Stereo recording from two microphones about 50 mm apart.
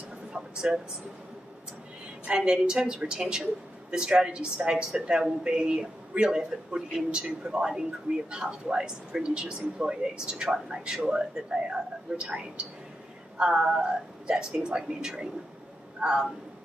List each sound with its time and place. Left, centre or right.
0.3 s speech: centre
2.2 s speech: centre